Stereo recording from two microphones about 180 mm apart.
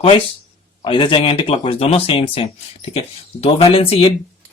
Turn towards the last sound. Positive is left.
turn(degrees=30)  # may be behind; listen again after turning